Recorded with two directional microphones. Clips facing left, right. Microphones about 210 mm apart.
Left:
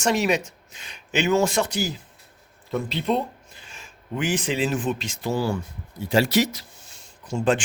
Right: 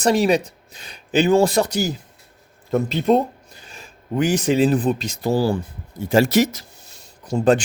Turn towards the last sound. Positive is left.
turn(degrees=-40)  # may be behind; listen again after turning